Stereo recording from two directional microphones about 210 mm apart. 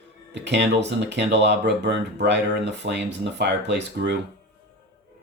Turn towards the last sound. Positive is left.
turn(degrees=-55)  # may be behind; listen again after turning